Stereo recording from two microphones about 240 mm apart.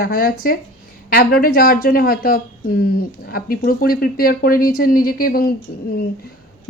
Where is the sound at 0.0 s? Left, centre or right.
Left.